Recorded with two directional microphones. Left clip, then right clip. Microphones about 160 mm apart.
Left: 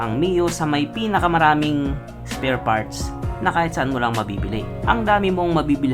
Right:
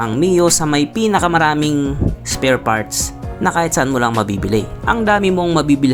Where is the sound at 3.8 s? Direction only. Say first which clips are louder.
Right 5 dB; 30° right (ahead or behind).